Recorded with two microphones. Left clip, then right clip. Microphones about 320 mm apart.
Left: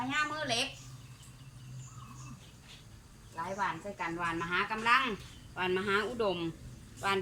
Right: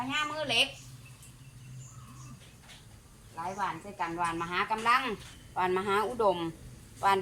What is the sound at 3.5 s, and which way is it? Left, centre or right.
A woman's voice, centre.